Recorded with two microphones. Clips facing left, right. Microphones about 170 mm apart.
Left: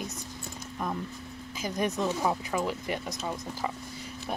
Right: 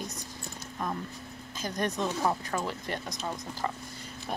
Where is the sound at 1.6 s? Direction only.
5° left (ahead or behind).